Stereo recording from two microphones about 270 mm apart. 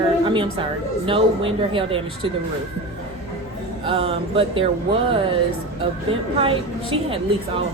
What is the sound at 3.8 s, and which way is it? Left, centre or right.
Speech, right.